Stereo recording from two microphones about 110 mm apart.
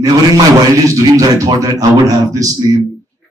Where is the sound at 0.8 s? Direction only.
30° right (ahead or behind).